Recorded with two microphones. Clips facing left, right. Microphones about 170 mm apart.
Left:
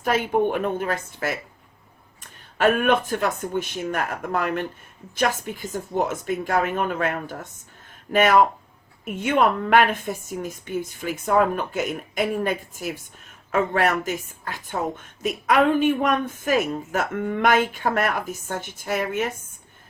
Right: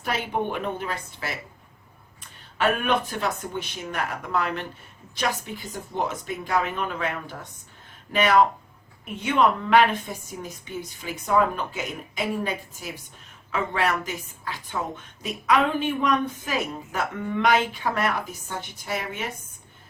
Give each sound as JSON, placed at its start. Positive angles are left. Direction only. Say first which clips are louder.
{"t": 0.0, "sound": "a woman's voice", "louder": "left 6 dB", "side_deg": 50}
{"t": 2.6, "sound": "a woman's voice", "louder": "left 4 dB", "side_deg": 50}